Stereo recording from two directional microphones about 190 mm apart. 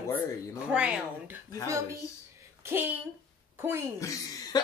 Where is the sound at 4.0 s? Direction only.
15° left (ahead or behind).